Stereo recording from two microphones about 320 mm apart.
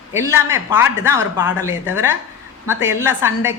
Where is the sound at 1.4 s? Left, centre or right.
Left.